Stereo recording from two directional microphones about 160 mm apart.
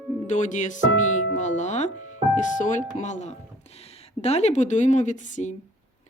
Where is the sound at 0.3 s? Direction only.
50° left (ahead or behind).